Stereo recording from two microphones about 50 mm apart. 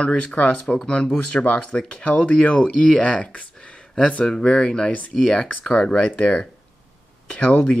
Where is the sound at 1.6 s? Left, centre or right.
Centre.